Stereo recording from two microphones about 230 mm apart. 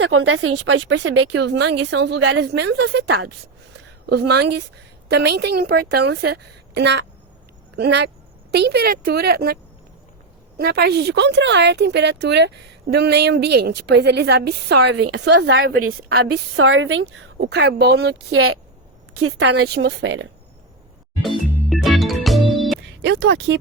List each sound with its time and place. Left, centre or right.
0.0 s speech: right
3.1 s speech: right
4.0 s a woman's voice: right
10.6 s speech: right
14.9 s a woman's voice: right
15.3 s speech: right
15.9 s speech: right
17.3 s speech: right
18.3 s speech: right
19.4 s speech: right
21.2 s organ: centre
22.5 s music: centre
23.0 s speech: right